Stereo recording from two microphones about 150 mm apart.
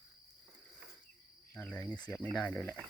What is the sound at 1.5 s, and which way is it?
Cricket, 10° left (ahead or behind).